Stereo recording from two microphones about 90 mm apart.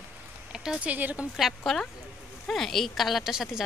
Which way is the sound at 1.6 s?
5° left (ahead or behind).